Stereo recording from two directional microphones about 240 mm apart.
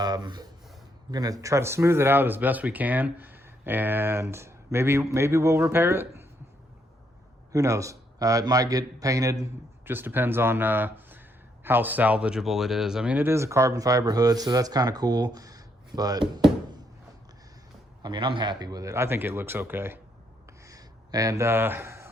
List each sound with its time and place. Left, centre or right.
0.0 s speech: centre
7.5 s speech: centre
18.0 s speech: centre
20.5 s a sound: centre